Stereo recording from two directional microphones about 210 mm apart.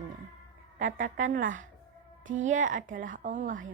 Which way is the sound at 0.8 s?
40° right (ahead or behind).